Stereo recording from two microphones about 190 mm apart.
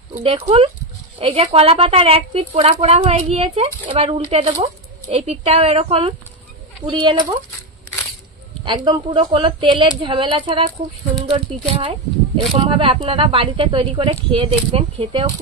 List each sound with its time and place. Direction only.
0.1 s speech: 30° right (ahead or behind)
8.6 s speech: 25° right (ahead or behind)